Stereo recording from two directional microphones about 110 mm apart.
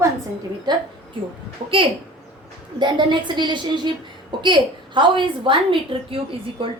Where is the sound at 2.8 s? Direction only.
45° right (ahead or behind).